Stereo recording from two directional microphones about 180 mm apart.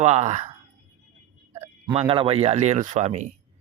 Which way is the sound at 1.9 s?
30° right (ahead or behind).